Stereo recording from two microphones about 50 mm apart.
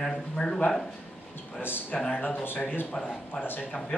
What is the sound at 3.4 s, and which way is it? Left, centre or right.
Speech, left.